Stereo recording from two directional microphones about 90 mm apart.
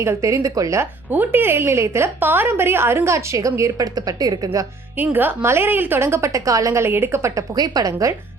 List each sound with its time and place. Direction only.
0.0 s a woman's voice: 35° right (ahead or behind)
1.1 s a woman's voice: 20° right (ahead or behind); by 4.6 s 45° right (ahead or behind)
4.9 s a woman's voice: 20° right (ahead or behind)
7.5 s a woman's voice: 45° right (ahead or behind)